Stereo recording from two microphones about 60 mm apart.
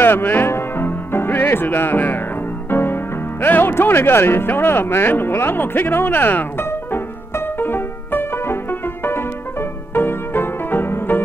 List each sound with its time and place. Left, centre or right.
0.0 s music: left